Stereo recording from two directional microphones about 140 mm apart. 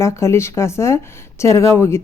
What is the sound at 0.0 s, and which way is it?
A woman's voice, 20° left (ahead or behind).